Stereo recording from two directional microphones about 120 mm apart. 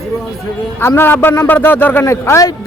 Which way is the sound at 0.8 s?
20° left (ahead or behind).